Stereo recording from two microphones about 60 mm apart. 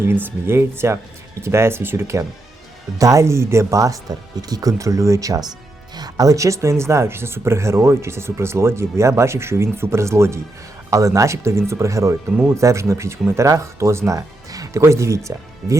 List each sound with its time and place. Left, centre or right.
0.0 s speech: right
3.0 s speech: right
3.2 s speech: right
10.9 s speech: right
14.1 s speech: right